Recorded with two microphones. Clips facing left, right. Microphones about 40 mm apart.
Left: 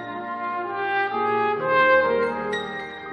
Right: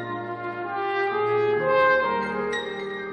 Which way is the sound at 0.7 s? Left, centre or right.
Centre.